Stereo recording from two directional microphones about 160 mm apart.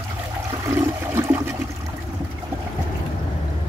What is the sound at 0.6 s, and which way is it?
Toilet flush, 15° right (ahead or behind).